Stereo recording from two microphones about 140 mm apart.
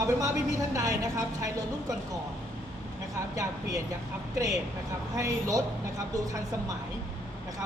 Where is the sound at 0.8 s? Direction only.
25° right (ahead or behind).